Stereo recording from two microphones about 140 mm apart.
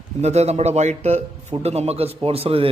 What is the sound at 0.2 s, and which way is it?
Speech, 50° right (ahead or behind).